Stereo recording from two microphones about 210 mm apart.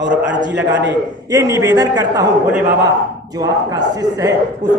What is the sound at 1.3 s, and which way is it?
Speech, 15° right (ahead or behind).